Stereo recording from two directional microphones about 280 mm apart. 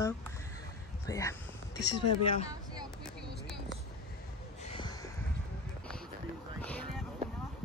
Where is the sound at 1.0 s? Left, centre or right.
Centre.